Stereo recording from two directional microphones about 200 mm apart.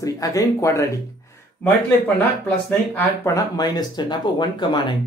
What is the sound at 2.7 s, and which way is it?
Speech, 10° left (ahead or behind).